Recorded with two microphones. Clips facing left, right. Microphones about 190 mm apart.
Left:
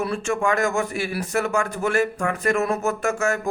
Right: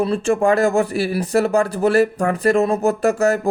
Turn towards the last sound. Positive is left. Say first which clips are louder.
# right 6 dB
turn(degrees=-35)  # may be behind; listen again after turning